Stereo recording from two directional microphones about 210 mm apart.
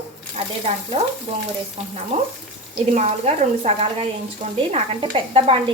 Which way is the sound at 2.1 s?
25° right (ahead or behind).